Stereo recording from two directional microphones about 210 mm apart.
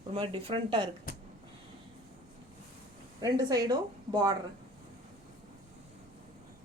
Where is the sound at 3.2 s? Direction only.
15° right (ahead or behind).